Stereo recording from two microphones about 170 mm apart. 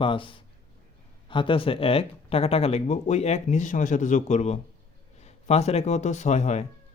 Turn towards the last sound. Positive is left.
turn(degrees=40)  # may be behind; listen again after turning